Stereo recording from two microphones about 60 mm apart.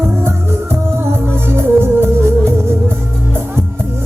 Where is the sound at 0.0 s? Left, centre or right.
Right.